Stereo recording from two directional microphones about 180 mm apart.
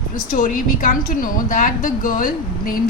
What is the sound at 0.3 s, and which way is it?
A woman's voice, 50° left (ahead or behind).